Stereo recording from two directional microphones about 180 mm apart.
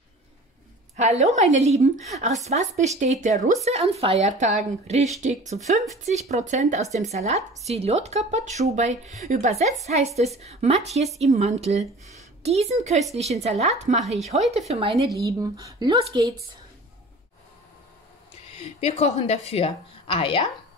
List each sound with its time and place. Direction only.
0.9 s speech: 40° right (ahead or behind)
14.0 s speech: centre (ahead or behind)
14.7 s speech: 30° right (ahead or behind)
15.2 s speech: 20° right (ahead or behind)
18.6 s a woman's voice: 35° left (ahead or behind)